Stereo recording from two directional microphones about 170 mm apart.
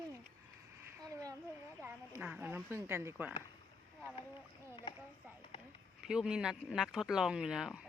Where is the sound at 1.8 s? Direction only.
10° right (ahead or behind).